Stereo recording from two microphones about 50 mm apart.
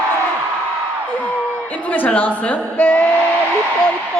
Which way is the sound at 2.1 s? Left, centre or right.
Left.